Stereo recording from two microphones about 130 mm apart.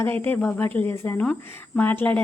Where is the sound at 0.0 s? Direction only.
15° left (ahead or behind).